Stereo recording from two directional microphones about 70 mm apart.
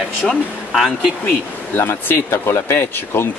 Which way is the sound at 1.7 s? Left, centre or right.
Left.